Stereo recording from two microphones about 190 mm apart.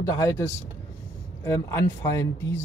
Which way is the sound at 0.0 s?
15° left (ahead or behind).